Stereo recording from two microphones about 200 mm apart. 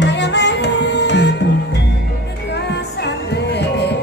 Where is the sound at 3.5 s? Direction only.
55° left (ahead or behind).